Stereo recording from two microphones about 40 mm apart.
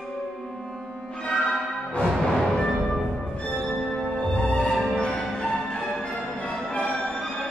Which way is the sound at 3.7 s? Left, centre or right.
Centre.